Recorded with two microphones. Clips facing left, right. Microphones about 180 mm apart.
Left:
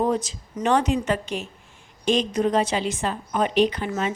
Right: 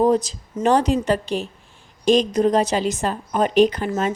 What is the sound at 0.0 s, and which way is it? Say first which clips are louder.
A woman's voice: right 6 dB; 35° right (ahead or behind).